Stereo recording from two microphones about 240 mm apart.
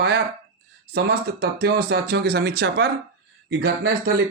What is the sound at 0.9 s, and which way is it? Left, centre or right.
Speech, right.